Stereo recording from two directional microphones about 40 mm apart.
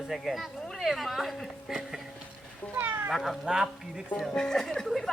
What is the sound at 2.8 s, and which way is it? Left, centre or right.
Speech, right.